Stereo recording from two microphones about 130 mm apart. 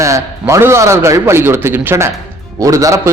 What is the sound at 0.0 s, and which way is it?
A man's voice, 25° right (ahead or behind).